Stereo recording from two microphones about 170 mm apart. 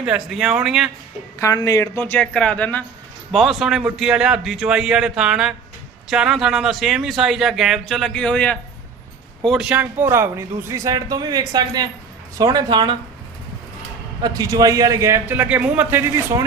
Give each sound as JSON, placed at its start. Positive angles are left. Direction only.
{"t": 0.0, "sound": "speech", "side_deg": -5}
{"t": 1.4, "sound": "speech", "side_deg": 20}
{"t": 14.2, "sound": "speech", "side_deg": -20}